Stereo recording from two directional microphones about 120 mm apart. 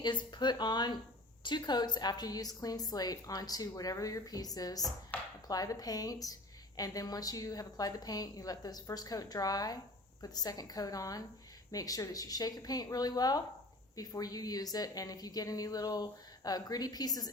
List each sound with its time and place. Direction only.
0.0 s speech: 40° left (ahead or behind)